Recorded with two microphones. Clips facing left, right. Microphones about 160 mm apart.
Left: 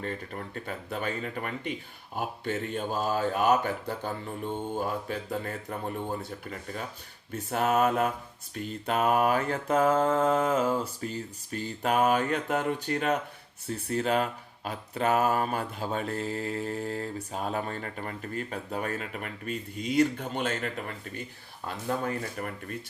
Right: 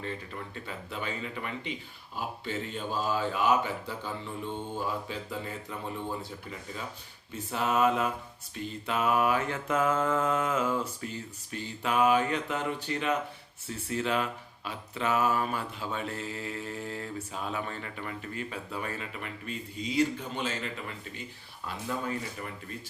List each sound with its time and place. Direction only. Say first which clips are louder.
0.0 s speech: left 2 dB; 45° left (ahead or behind)
8.9 s mantra: left 2 dB; 45° left (ahead or behind)
11.5 s speech: left 2 dB; 45° left (ahead or behind)